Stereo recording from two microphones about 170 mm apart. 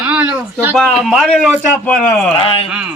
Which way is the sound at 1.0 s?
Centre (ahead or behind).